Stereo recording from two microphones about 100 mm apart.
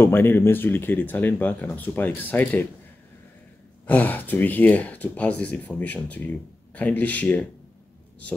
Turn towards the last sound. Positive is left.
turn(degrees=15)  # may be behind; listen again after turning